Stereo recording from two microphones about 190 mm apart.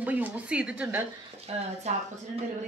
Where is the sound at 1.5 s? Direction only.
35° right (ahead or behind).